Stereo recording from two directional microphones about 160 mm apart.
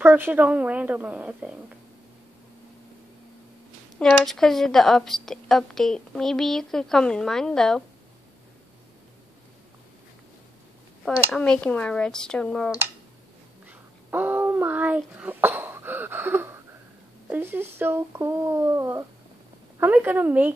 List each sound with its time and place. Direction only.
0.0 s speech: 10° right (ahead or behind)
4.0 s a woman's voice: centre (ahead or behind)
11.3 s a woman's voice: 5° left (ahead or behind)
13.7 s speech: 10° right (ahead or behind)